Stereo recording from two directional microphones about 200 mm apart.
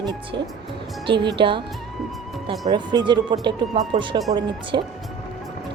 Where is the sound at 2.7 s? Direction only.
20° right (ahead or behind).